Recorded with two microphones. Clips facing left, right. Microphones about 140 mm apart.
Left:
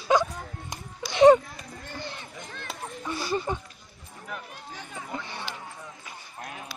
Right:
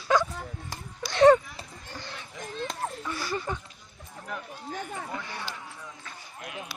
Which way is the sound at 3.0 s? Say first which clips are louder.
Left 3 dB; 20° left (ahead or behind).